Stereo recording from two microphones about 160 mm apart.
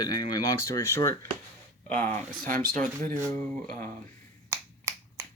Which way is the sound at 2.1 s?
60° right (ahead or behind).